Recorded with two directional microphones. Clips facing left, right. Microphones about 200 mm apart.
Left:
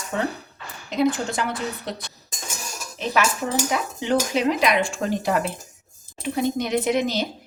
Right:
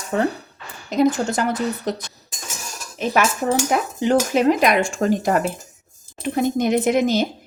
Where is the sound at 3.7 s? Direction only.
50° right (ahead or behind).